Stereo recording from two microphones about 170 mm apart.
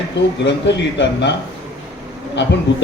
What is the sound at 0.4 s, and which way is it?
Speech, 90° left.